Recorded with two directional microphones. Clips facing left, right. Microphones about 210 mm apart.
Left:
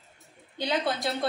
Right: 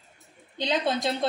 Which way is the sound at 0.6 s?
20° right (ahead or behind).